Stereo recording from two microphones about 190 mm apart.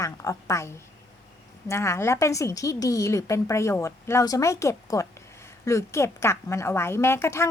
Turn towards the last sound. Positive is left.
turn(degrees=15)  # may be behind; listen again after turning